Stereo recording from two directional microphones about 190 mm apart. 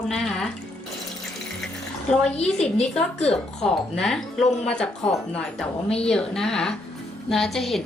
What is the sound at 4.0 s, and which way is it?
A woman's voice, 5° left (ahead or behind).